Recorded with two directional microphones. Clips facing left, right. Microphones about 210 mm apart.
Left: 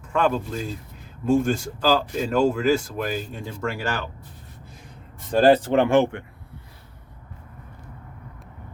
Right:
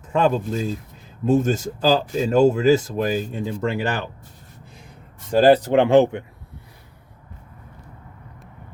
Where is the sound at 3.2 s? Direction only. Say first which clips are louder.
Right 5 dB; 15° right (ahead or behind).